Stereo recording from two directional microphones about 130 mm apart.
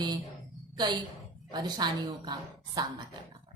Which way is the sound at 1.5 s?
35° right (ahead or behind).